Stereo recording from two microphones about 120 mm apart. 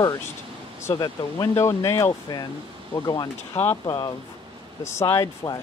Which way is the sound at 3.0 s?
35° left (ahead or behind).